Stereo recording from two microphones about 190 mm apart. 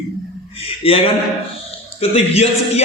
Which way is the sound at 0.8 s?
30° left (ahead or behind).